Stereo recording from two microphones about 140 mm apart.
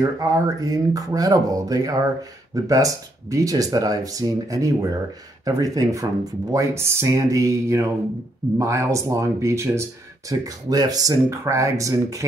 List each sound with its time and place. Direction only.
0.0 s speech: 25° right (ahead or behind)